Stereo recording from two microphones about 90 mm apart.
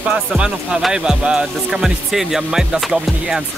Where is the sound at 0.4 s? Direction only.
10° right (ahead or behind).